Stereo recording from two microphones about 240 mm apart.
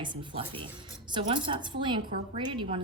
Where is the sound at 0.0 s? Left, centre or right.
Centre.